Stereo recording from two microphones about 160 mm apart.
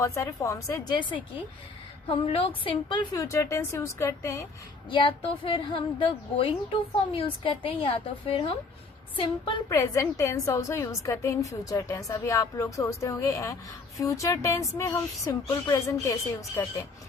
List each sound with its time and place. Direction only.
0.0 s a woman's voice: 20° left (ahead or behind)
4.9 s a woman's voice: 30° left (ahead or behind)
9.6 s a woman's voice: 20° left (ahead or behind)